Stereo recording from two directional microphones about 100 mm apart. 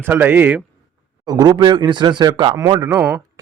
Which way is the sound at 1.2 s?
45° right (ahead or behind).